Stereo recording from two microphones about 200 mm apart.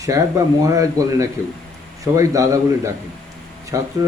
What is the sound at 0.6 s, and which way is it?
Speech, 15° right (ahead or behind).